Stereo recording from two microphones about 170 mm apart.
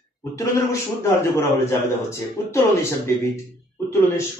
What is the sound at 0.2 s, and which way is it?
A man's voice, 20° left (ahead or behind).